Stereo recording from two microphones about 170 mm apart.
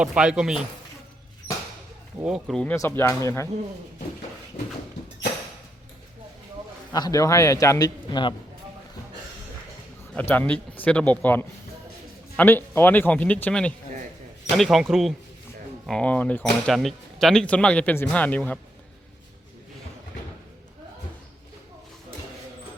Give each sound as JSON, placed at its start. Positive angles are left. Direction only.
{"t": 0.0, "sound": "speech", "side_deg": -5}
{"t": 2.2, "sound": "speech", "side_deg": 0}
{"t": 2.7, "sound": "speech", "side_deg": 15}
{"t": 6.9, "sound": "a man's voice", "side_deg": 20}
{"t": 10.2, "sound": "speech", "side_deg": 10}